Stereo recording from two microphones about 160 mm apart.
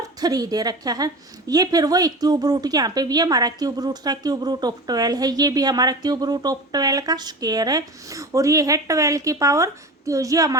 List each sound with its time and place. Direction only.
0.2 s a woman's voice: 25° right (ahead or behind)